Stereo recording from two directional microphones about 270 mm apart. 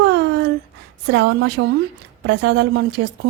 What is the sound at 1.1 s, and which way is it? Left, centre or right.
A woman's voice, right.